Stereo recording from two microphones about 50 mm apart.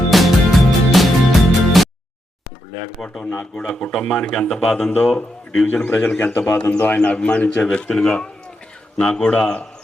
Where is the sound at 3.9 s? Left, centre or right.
Centre.